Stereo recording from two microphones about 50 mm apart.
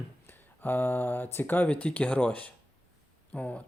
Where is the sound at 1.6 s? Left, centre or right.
Left.